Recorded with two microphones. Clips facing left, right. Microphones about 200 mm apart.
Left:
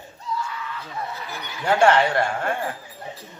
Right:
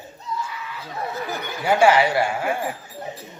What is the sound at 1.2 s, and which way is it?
Speech, 45° right (ahead or behind).